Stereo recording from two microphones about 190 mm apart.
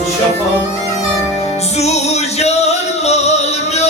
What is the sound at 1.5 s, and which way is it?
Music, 35° left (ahead or behind).